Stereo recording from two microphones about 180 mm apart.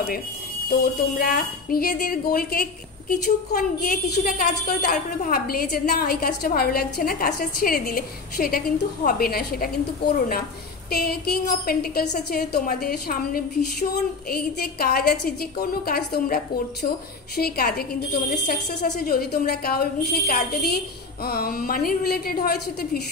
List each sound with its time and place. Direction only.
0.7 s a woman's voice: 55° left (ahead or behind)
10.9 s a woman's voice: 60° left (ahead or behind)
17.4 s a woman's voice: 55° left (ahead or behind)